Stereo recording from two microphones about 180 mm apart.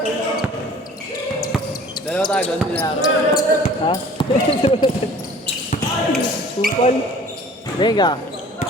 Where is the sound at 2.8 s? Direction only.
20° left (ahead or behind).